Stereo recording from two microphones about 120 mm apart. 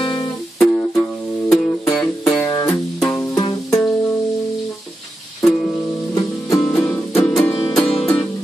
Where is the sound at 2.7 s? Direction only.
5° left (ahead or behind).